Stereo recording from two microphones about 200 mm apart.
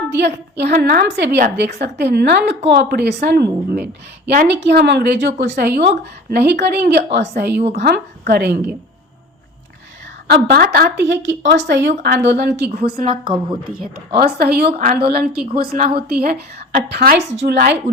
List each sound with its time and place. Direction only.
0.1 s a woman's voice: 60° right (ahead or behind)
10.2 s a woman's voice: 50° right (ahead or behind)
13.1 s a woman's voice: 25° right (ahead or behind)
14.2 s a woman's voice: 50° right (ahead or behind)